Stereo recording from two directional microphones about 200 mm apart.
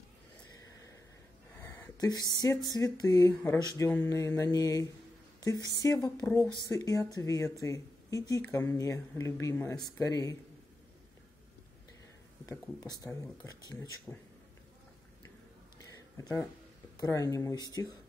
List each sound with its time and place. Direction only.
1.6 s speech: 15° left (ahead or behind)
12.4 s speech: 20° left (ahead or behind)
16.9 s speech: 15° left (ahead or behind)